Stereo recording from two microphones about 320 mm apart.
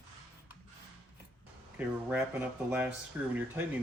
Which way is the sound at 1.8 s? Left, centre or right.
Centre.